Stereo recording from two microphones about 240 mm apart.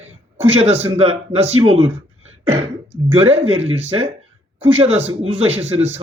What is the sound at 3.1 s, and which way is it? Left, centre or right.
Speech, right.